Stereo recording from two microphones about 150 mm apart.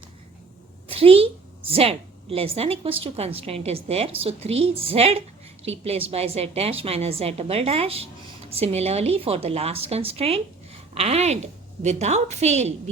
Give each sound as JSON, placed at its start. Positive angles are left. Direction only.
{"t": 0.9, "sound": "a woman's voice", "side_deg": -40}